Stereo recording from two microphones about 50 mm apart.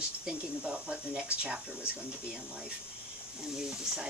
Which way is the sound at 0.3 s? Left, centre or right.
Centre.